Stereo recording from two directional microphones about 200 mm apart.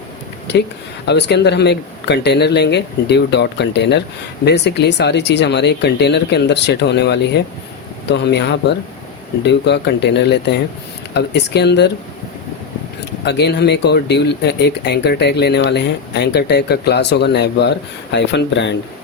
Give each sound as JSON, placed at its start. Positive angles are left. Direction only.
{"t": 1.0, "sound": "speech", "side_deg": 60}
{"t": 13.2, "sound": "speech", "side_deg": 60}